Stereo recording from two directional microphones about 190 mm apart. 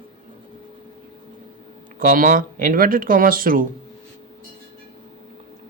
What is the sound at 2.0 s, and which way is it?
Speech, 45° right (ahead or behind).